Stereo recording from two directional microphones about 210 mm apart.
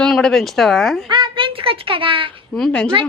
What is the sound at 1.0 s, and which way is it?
Speech, 20° right (ahead or behind).